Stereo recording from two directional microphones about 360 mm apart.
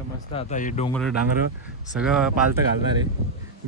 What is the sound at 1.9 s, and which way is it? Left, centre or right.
Speech, centre.